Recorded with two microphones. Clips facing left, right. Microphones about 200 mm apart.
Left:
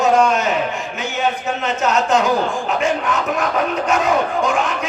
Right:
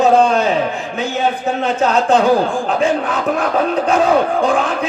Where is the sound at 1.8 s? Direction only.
30° right (ahead or behind).